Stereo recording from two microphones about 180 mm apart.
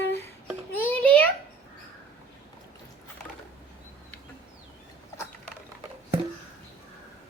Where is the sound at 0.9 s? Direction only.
10° left (ahead or behind).